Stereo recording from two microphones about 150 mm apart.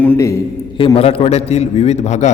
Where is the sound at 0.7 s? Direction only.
35° left (ahead or behind).